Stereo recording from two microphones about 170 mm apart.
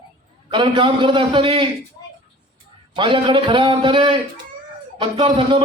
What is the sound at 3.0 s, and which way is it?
A man's voice, 30° right (ahead or behind).